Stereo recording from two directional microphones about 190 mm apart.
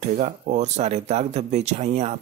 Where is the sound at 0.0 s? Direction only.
40° right (ahead or behind).